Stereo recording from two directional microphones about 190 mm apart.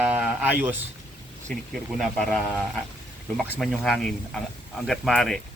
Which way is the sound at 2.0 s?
Centre (ahead or behind).